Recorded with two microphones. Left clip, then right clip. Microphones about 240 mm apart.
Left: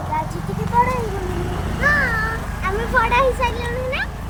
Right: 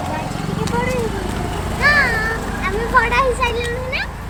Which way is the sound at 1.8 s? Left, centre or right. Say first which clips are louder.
Right 3 dB; centre.